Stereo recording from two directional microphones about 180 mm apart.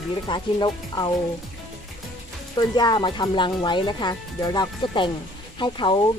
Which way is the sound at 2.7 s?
20° left (ahead or behind).